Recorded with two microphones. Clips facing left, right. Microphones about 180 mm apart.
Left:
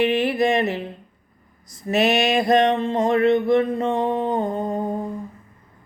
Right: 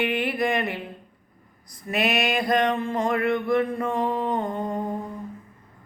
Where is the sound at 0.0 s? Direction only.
25° left (ahead or behind).